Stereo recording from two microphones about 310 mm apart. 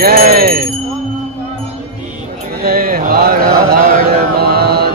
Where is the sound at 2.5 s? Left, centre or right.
Right.